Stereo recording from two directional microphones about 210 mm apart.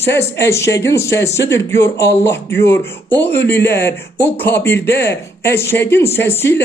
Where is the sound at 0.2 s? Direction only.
10° left (ahead or behind).